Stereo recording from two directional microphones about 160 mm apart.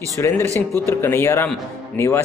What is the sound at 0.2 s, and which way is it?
Speech, 20° left (ahead or behind).